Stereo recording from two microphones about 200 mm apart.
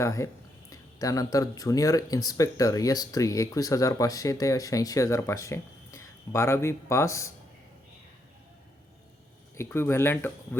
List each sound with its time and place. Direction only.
0.0 s speech: 15° left (ahead or behind)
9.6 s speech: 10° left (ahead or behind)